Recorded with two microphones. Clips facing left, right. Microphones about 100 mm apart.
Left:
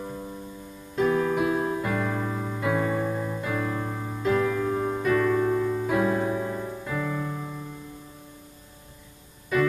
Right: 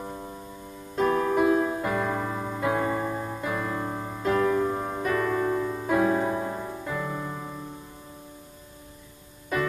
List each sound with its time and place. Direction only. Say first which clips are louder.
0.9 s keyboard: even; 40° right (ahead or behind)
3.3 s music: left 1 dB; 35° right (ahead or behind)
6.4 s music: left 1 dB; 20° right (ahead or behind)
7.0 s music: left 2 dB; 35° right (ahead or behind)